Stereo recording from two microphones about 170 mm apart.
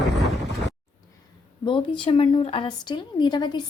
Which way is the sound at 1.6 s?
30° left (ahead or behind).